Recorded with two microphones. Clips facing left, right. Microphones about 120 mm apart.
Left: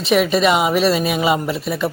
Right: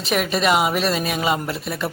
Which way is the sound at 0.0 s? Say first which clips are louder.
Left 5 dB; centre (ahead or behind).